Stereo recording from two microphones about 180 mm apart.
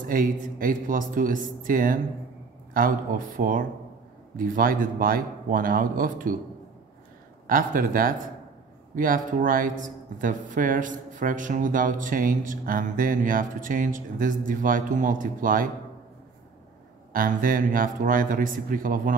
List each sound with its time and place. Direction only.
0.0 s speech: 50° right (ahead or behind)
7.4 s speech: 50° right (ahead or behind)
17.1 s speech: 50° right (ahead or behind)